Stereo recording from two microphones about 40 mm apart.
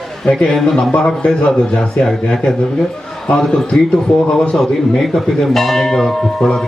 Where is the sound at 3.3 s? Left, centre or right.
Centre.